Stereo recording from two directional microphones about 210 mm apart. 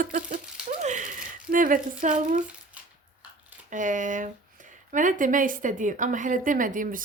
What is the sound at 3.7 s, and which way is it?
Speech, 35° right (ahead or behind).